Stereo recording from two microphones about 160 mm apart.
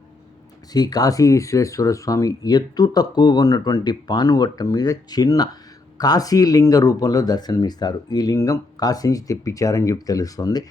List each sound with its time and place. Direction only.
0.7 s speech: 25° left (ahead or behind)